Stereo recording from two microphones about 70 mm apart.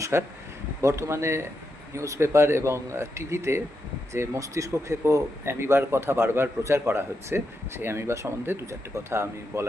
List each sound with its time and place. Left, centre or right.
0.0 s speech: right